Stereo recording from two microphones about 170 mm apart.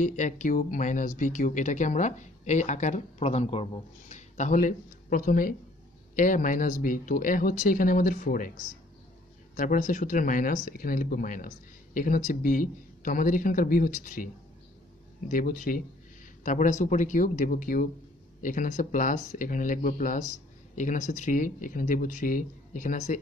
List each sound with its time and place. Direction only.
0.0 s speech: 50° left (ahead or behind)
9.6 s speech: 50° left (ahead or behind)
16.4 s speech: 45° left (ahead or behind)